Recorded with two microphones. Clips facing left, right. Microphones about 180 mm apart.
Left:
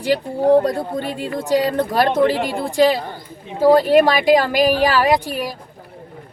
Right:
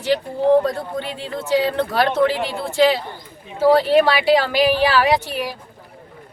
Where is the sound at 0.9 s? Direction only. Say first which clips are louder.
Left 3 dB; 45° left (ahead or behind).